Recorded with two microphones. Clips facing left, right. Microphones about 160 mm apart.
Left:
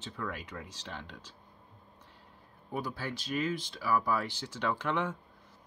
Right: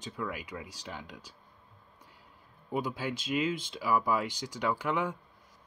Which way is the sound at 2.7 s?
20° right (ahead or behind).